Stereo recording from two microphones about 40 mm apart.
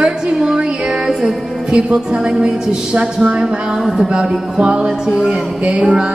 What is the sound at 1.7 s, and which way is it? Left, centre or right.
A woman's voice, right.